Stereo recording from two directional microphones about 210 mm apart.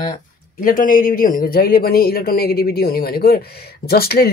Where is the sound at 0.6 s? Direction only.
40° left (ahead or behind).